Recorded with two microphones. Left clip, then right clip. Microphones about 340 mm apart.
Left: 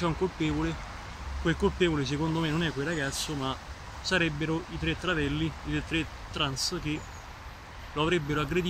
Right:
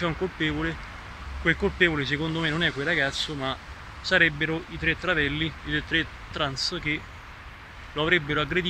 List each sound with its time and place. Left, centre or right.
0.0 s speech: centre
7.9 s speech: centre